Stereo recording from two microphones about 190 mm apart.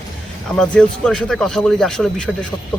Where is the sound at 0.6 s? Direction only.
5° left (ahead or behind).